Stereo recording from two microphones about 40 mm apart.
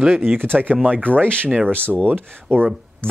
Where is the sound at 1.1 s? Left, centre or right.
Left.